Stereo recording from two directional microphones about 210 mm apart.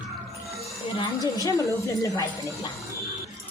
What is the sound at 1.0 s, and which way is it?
A woman's voice, 15° left (ahead or behind).